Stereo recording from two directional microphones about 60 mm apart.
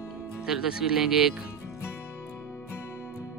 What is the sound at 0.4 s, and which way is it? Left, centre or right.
Speech, centre.